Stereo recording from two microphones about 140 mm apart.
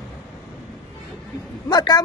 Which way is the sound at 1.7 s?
30° left (ahead or behind).